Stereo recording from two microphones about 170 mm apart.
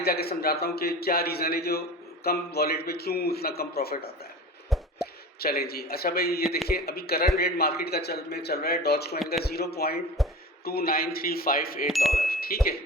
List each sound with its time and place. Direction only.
0.0 s a man's voice: 65° left (ahead or behind)
9.1 s a man's voice: centre (ahead or behind)
9.4 s a man's voice: 70° left (ahead or behind)
10.2 s speech: centre (ahead or behind)
10.7 s a man's voice: 60° left (ahead or behind)
11.9 s a man's voice: centre (ahead or behind)
12.1 s speech: 60° left (ahead or behind)